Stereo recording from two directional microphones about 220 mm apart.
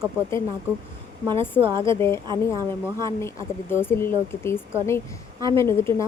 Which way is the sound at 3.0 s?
15° left (ahead or behind).